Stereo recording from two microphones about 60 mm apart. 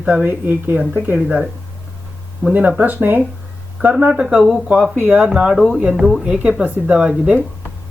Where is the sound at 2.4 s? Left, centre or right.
Right.